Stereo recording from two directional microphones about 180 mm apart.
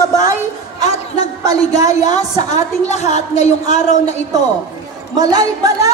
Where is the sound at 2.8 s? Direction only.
40° left (ahead or behind).